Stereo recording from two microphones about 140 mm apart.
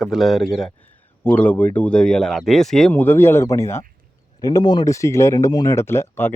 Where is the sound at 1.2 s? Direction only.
15° left (ahead or behind).